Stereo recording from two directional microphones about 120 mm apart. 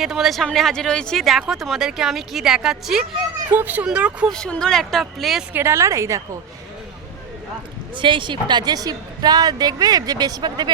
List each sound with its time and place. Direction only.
0.0 s speech: 5° right (ahead or behind)
4.3 s speech: 5° left (ahead or behind)
5.5 s a woman's voice: 20° right (ahead or behind)
7.9 s a woman's voice: 45° right (ahead or behind)